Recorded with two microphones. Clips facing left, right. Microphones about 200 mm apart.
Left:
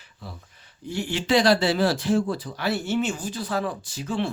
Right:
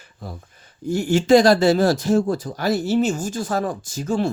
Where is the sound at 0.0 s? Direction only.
45° right (ahead or behind).